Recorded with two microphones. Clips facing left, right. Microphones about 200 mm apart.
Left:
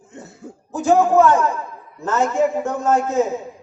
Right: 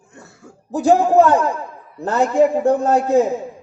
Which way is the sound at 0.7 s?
35° right (ahead or behind).